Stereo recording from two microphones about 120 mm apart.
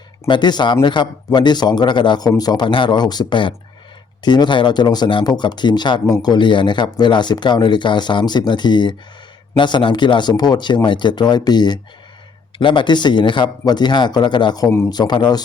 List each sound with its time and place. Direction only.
0.3 s speech: 40° left (ahead or behind)